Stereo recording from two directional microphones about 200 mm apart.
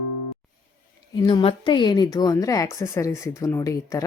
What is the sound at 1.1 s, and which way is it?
A woman's voice, 25° left (ahead or behind).